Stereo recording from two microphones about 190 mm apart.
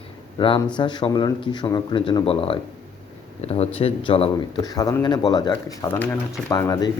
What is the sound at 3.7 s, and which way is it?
Speech, 30° left (ahead or behind).